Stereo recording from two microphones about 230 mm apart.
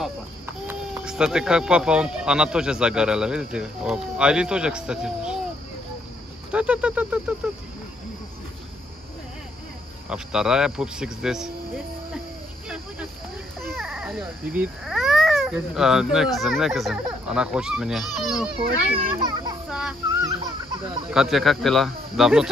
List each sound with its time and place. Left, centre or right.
0.7 s speech: centre
6.5 s speech: centre
10.0 s speech: centre
13.7 s speech: centre
18.6 s a child's voice: right
19.7 s a sound: centre
21.1 s speech: centre